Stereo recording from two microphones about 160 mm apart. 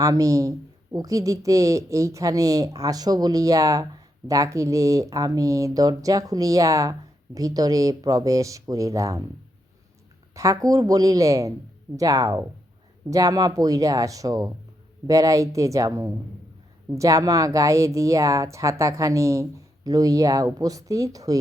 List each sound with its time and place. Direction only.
0.0 s speech: 20° right (ahead or behind)
10.3 s speech: 20° right (ahead or behind)